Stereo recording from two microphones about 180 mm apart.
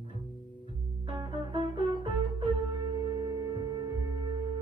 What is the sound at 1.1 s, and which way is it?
Music, 25° right (ahead or behind).